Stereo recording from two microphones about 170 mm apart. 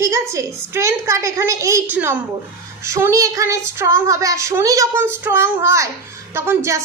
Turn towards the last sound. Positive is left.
turn(degrees=-15)  # may be behind; listen again after turning